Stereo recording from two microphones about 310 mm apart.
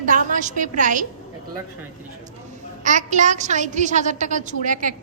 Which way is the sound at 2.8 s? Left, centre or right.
Right.